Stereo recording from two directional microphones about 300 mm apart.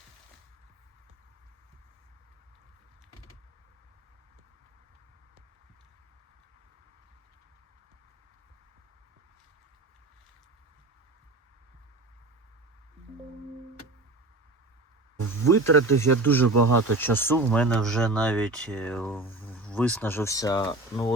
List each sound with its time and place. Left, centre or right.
15.5 s speech: right
16.2 s speech: centre
16.5 s speech: right
17.0 s speech: centre